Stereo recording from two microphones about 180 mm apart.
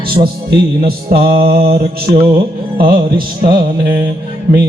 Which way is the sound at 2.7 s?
55° right (ahead or behind).